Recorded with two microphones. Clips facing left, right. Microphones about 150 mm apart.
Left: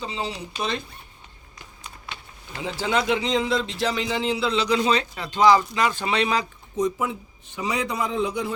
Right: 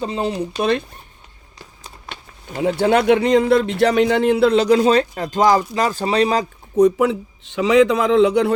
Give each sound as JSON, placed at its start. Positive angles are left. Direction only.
{"t": 0.0, "sound": "speech", "side_deg": -55}
{"t": 2.0, "sound": "speech", "side_deg": -55}
{"t": 6.7, "sound": "a man's voice", "side_deg": -70}